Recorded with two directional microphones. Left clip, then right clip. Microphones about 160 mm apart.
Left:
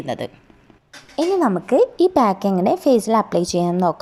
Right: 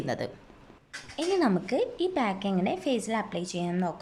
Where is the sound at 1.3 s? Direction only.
Centre (ahead or behind).